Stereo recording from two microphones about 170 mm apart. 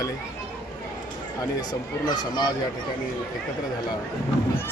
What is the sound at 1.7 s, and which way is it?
Speech, 25° left (ahead or behind).